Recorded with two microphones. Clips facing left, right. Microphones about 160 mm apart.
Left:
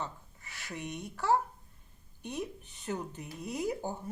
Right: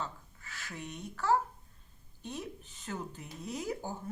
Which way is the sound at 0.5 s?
15° left (ahead or behind).